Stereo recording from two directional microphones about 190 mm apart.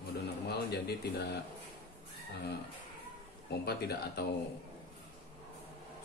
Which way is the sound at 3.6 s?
55° left (ahead or behind).